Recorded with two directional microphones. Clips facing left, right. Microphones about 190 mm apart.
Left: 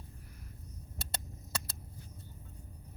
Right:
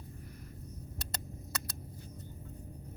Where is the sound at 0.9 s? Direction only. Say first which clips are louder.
Left 2 dB; 25° left (ahead or behind).